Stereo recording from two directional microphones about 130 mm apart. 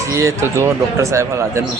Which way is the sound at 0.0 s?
25° right (ahead or behind).